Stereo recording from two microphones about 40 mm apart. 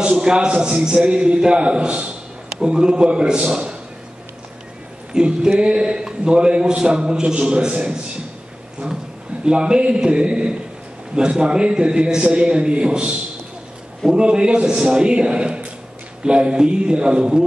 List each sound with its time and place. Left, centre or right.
0.0 s a man's voice: centre
5.1 s a man's voice: right
9.4 s a man's voice: right
14.1 s a man's voice: right